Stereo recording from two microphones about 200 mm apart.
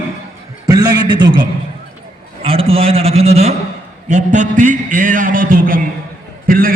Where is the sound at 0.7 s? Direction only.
20° right (ahead or behind).